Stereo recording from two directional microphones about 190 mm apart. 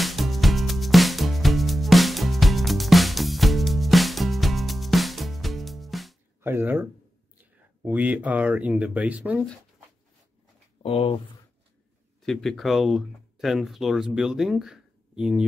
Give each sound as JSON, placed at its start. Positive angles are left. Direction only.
{"t": 0.0, "sound": "music", "side_deg": 0}
{"t": 6.4, "sound": "speech", "side_deg": -10}
{"t": 10.8, "sound": "speech", "side_deg": 30}
{"t": 12.2, "sound": "speech", "side_deg": 0}